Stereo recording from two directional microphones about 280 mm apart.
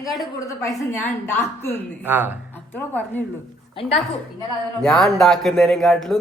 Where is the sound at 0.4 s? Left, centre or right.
Centre.